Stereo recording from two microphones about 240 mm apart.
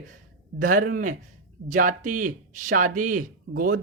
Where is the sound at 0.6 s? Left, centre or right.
Right.